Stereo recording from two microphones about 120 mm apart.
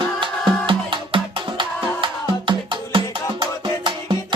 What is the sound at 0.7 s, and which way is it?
Music, 45° right (ahead or behind).